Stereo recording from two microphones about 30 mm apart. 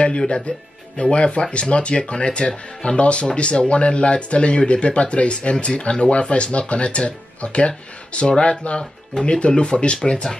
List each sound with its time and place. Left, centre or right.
0.3 s speech: left